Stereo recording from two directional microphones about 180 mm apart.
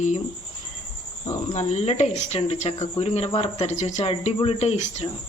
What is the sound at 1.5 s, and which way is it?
Speech, 40° left (ahead or behind).